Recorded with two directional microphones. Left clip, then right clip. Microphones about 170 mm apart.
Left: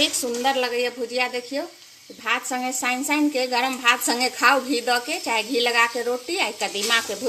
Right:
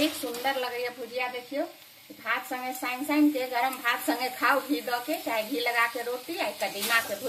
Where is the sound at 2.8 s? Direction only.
40° left (ahead or behind).